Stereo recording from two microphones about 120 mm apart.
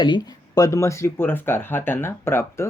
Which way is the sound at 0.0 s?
35° left (ahead or behind).